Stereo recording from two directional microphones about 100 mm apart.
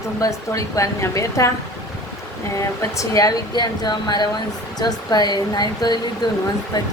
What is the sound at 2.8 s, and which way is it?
A woman's voice, 35° left (ahead or behind).